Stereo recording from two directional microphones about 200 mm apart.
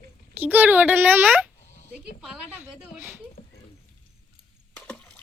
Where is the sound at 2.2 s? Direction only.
5° right (ahead or behind).